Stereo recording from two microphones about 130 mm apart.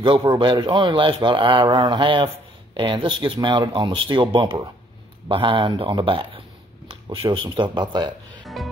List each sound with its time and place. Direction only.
0.3 s speech: 40° right (ahead or behind)
6.9 s a sound: 45° right (ahead or behind)
7.4 s speech: 40° right (ahead or behind)
8.6 s music: centre (ahead or behind)